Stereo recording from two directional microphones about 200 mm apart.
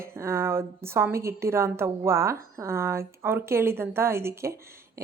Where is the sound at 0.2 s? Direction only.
15° right (ahead or behind).